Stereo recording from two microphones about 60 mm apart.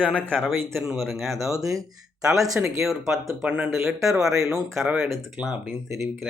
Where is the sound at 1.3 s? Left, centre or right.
Right.